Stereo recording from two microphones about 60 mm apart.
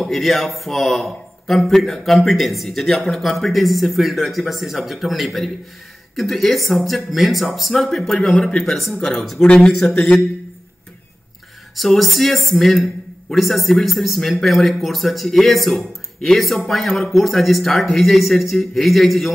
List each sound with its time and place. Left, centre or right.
0.0 s speech: centre
11.7 s speech: centre